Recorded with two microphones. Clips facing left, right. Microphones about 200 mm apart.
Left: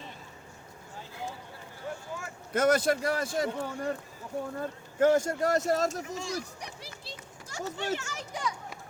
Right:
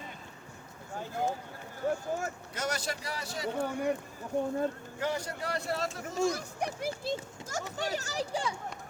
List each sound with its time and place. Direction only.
0.9 s a sound: 50° right (ahead or behind)
1.8 s speech: 45° right (ahead or behind)
2.5 s speech: 55° left (ahead or behind)
4.4 s speech: 20° right (ahead or behind)
4.9 s speech: 50° left (ahead or behind)
6.1 s speech: 50° right (ahead or behind); by 8.5 s 30° right (ahead or behind)